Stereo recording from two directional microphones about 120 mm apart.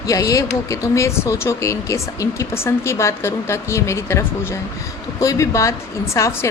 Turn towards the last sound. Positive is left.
turn(degrees=25)  # may be behind; listen again after turning